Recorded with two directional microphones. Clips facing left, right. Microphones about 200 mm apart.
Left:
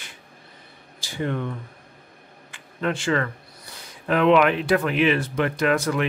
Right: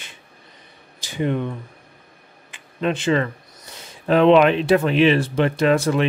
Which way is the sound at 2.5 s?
20° right (ahead or behind).